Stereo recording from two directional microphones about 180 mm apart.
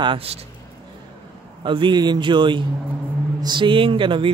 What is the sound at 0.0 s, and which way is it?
Speech, 30° right (ahead or behind).